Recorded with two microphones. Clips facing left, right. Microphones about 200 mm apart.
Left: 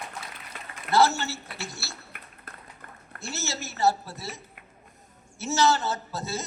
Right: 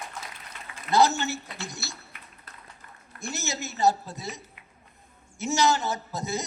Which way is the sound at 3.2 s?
15° right (ahead or behind).